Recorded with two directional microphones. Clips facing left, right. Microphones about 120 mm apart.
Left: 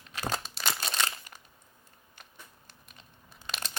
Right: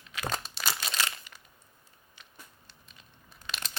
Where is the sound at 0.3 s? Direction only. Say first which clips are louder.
Left 1 dB; centre (ahead or behind).